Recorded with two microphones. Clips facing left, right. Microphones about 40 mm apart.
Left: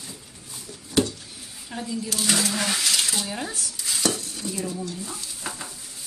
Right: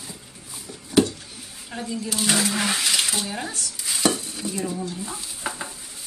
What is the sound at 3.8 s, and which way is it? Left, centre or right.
Stir, centre.